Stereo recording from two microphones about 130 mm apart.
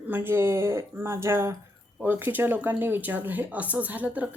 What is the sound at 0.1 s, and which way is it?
Speech, 15° right (ahead or behind).